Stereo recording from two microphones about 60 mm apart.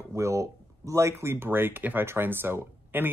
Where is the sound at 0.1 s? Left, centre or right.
Right.